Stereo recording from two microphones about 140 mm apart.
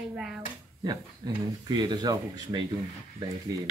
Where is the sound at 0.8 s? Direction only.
30° right (ahead or behind).